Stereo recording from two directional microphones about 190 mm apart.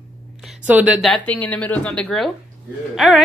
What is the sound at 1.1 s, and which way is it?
Speech, 10° left (ahead or behind).